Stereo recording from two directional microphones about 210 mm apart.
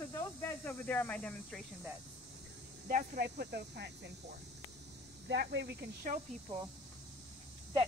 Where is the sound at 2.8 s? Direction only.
40° right (ahead or behind).